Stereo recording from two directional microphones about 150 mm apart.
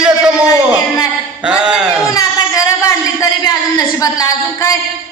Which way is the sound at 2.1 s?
25° left (ahead or behind).